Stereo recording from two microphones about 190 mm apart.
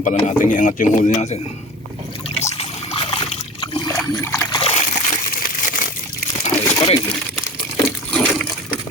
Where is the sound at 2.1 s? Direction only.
30° left (ahead or behind).